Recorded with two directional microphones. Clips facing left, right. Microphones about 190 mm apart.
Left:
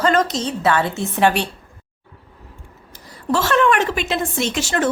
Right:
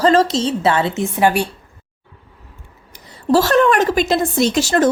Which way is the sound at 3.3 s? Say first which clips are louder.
Right 4 dB; 35° right (ahead or behind).